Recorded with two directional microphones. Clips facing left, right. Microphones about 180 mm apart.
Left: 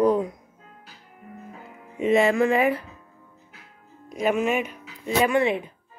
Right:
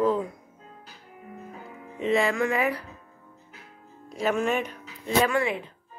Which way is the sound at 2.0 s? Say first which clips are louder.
Left 5 dB; 25° left (ahead or behind).